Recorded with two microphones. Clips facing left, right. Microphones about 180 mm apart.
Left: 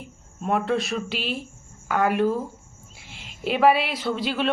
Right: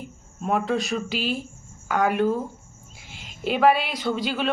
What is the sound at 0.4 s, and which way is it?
Speech, centre (ahead or behind).